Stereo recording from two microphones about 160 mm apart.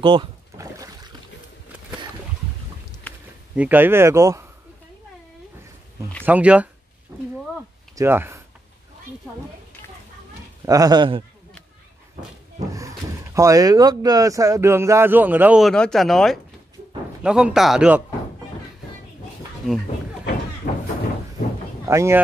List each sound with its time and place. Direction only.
0.0 s speech: 30° right (ahead or behind)
3.1 s a sound: 10° left (ahead or behind)
3.5 s speech: 10° right (ahead or behind)
6.2 s speech: 10° right (ahead or behind)
7.1 s speech: 20° right (ahead or behind)
10.6 s speech: 20° right (ahead or behind)
12.7 s speech: 20° right (ahead or behind)
15.7 s a man's voice: 5° left (ahead or behind)
20.7 s a sound: 60° left (ahead or behind)
21.8 s speech: 15° right (ahead or behind)